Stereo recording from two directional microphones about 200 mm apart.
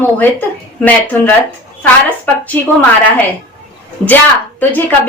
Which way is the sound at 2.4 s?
10° left (ahead or behind).